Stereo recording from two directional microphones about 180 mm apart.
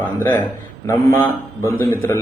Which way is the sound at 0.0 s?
10° left (ahead or behind).